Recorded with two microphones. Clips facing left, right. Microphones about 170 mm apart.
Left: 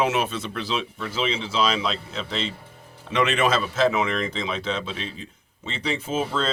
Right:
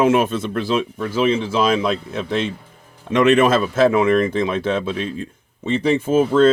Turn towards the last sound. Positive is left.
turn(degrees=-55)  # may be behind; listen again after turning